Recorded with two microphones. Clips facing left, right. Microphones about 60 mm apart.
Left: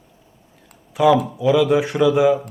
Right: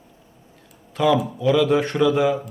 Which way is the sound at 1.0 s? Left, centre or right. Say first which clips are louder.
Left 4 dB; centre.